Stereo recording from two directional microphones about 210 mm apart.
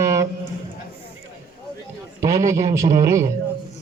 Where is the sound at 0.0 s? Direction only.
15° right (ahead or behind).